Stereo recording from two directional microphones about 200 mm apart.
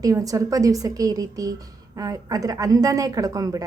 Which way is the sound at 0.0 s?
15° right (ahead or behind).